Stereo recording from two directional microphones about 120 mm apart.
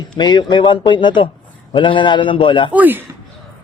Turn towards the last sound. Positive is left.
turn(degrees=-15)  # may be behind; listen again after turning